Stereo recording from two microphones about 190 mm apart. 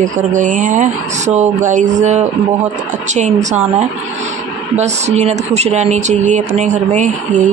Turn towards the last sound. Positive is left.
turn(degrees=-40)  # may be behind; listen again after turning